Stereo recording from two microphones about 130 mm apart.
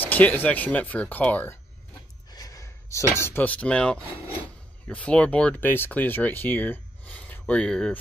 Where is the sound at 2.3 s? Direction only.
30° left (ahead or behind).